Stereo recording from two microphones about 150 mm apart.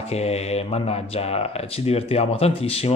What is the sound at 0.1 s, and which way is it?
Speech, 45° left (ahead or behind).